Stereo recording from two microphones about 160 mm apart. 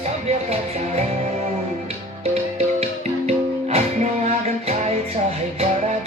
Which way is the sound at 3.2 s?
40° right (ahead or behind).